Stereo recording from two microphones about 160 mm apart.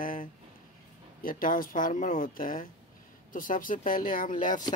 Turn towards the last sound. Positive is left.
turn(degrees=55)  # may be behind; listen again after turning